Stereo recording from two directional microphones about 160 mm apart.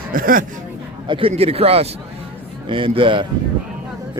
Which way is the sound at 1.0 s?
30° right (ahead or behind).